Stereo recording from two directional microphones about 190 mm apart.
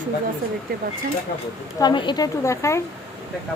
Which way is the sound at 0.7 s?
55° right (ahead or behind).